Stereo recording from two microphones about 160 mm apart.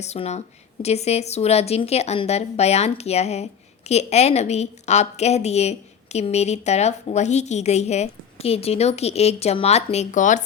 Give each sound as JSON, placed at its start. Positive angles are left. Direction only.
{"t": 0.0, "sound": "a woman's voice", "side_deg": 45}